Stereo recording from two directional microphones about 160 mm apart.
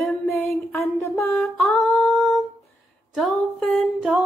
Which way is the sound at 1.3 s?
5° left (ahead or behind).